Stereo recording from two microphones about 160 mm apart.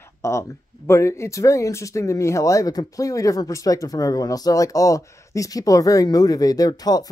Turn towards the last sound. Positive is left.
turn(degrees=25)  # may be behind; listen again after turning